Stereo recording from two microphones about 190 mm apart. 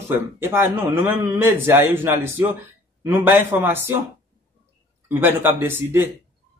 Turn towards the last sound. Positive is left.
turn(degrees=-10)  # may be behind; listen again after turning